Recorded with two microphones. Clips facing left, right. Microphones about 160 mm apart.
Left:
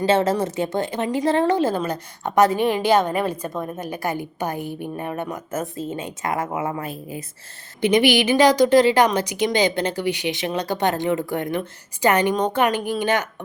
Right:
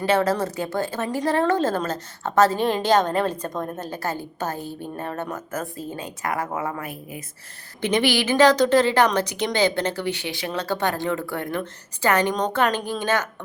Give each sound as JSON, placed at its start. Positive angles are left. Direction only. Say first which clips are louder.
{"t": 0.0, "sound": "a woman's voice", "louder": "left 2 dB", "side_deg": 25}
{"t": 1.5, "sound": "a woman's voice", "louder": "left 2 dB", "side_deg": 10}
{"t": 7.8, "sound": "a woman's voice", "louder": "left 4 dB", "side_deg": 15}